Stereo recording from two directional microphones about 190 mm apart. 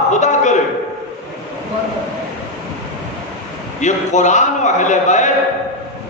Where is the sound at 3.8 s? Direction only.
40° left (ahead or behind).